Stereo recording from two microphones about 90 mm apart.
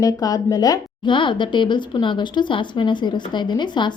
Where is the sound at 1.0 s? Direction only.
65° left (ahead or behind).